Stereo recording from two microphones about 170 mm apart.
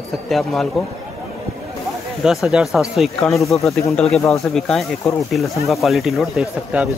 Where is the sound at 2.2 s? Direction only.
Centre (ahead or behind).